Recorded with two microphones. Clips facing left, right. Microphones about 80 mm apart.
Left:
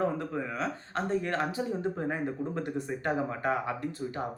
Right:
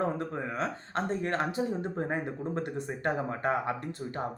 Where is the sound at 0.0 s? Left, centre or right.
Right.